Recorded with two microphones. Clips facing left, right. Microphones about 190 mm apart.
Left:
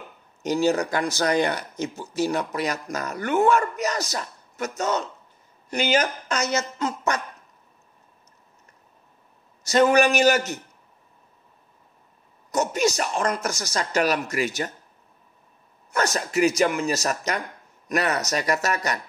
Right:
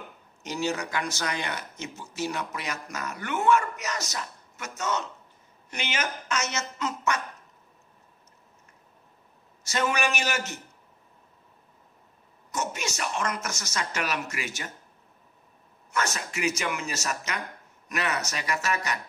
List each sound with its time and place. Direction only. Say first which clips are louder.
0.4 s speech: left 8 dB; 35° left (ahead or behind)
9.7 s speech: left 10 dB; 35° left (ahead or behind)
12.4 s speech: left 10 dB; 35° left (ahead or behind)
15.9 s speech: left 6 dB; 35° left (ahead or behind)